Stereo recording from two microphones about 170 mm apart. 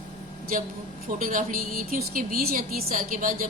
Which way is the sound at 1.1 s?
55° right (ahead or behind).